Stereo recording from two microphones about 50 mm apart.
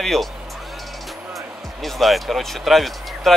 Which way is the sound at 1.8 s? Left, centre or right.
Centre.